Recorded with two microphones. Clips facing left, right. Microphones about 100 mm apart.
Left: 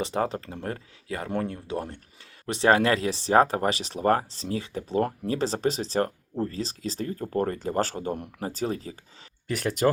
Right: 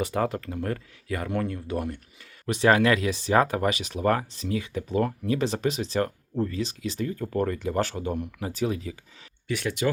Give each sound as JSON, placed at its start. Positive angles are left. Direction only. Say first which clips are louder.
{"t": 0.0, "sound": "speech", "louder": "right 1 dB", "side_deg": 25}